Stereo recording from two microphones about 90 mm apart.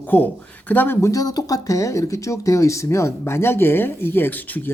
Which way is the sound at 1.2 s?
40° left (ahead or behind).